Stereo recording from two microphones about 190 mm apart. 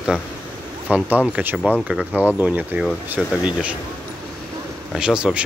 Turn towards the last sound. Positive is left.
turn(degrees=-5)  # may be behind; listen again after turning